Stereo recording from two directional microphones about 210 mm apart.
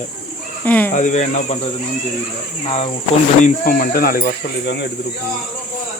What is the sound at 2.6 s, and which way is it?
Speech, 30° left (ahead or behind).